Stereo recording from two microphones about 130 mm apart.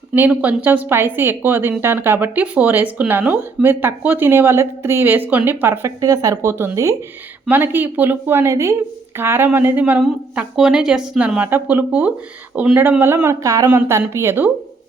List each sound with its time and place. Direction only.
0.1 s speech: 10° right (ahead or behind)